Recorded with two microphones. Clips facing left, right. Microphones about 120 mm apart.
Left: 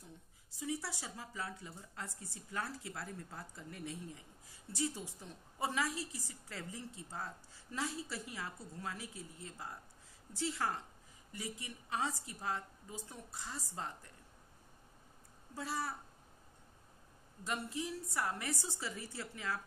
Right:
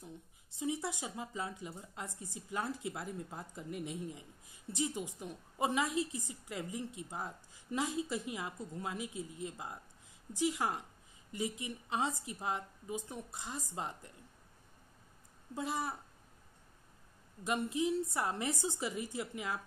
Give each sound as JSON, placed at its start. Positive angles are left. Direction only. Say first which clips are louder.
{"t": 0.0, "sound": "a woman's voice", "louder": "right 6 dB", "side_deg": -20}
{"t": 15.5, "sound": "speech", "louder": "right 3 dB", "side_deg": -20}
{"t": 17.4, "sound": "a woman's voice", "louder": "right 6 dB", "side_deg": -20}